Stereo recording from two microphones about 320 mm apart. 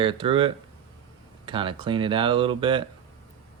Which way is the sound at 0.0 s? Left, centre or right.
Centre.